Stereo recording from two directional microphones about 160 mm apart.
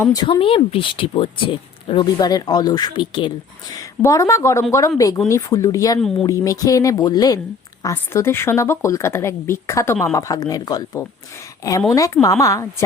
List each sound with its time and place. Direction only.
0.0 s a woman's voice: 25° left (ahead or behind)